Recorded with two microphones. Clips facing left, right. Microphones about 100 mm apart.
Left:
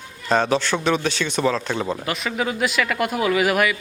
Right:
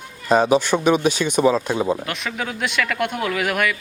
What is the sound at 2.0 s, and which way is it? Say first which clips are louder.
Speech: left 3 dB; centre (ahead or behind).